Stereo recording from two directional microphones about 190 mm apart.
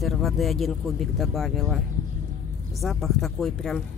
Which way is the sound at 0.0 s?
Centre (ahead or behind).